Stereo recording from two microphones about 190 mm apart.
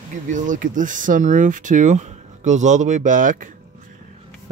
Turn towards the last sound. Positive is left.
turn(degrees=-45)  # may be behind; listen again after turning